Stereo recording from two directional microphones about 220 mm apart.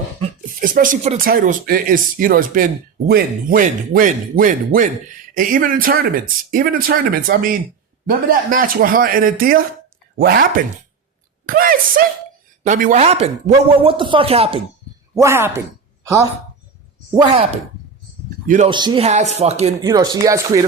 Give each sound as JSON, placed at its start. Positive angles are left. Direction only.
{"t": 0.4, "sound": "speech", "side_deg": -40}
{"t": 15.1, "sound": "speech", "side_deg": -10}
{"t": 17.2, "sound": "speech", "side_deg": -25}
{"t": 18.4, "sound": "speech", "side_deg": -35}
{"t": 18.7, "sound": "speech", "side_deg": -20}
{"t": 19.8, "sound": "speech", "side_deg": -15}